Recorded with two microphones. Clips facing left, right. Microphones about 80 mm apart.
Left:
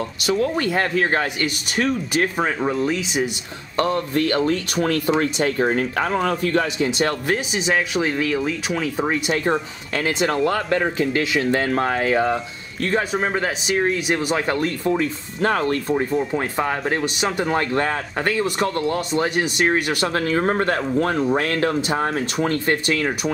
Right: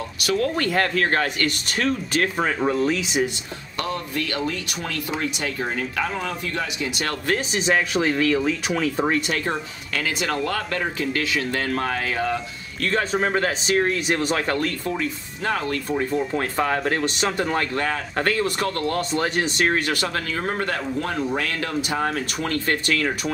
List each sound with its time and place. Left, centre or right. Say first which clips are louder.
0.2 s speech: left 1 dB; left
2.3 s speech: even; centre
3.7 s speech: left 7 dB; left
7.2 s speech: left 1 dB; centre
9.9 s speech: left 4 dB; left
13.1 s speech: even; centre
14.5 s speech: left 3 dB; left
15.0 s speech: left 5 dB; left
16.1 s speech: left 2 dB; centre
16.3 s speech: even; centre
17.6 s speech: left 3 dB; left
18.1 s speech: left 1 dB; centre
20.2 s speech: left 6 dB; left